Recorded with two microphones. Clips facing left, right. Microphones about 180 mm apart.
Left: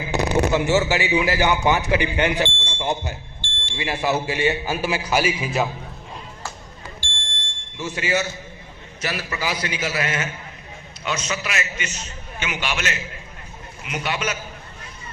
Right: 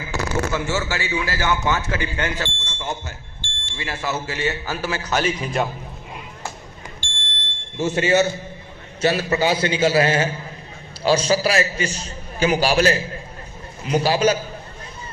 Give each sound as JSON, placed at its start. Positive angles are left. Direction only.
{"t": 0.0, "sound": "a man's voice", "side_deg": 20}
{"t": 7.8, "sound": "a man's voice", "side_deg": -25}